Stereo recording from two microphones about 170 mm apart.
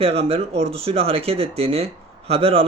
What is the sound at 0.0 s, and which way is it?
Speech, 35° right (ahead or behind).